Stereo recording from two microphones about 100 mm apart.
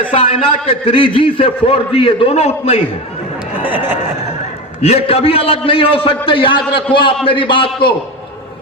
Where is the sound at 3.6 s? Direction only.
20° right (ahead or behind).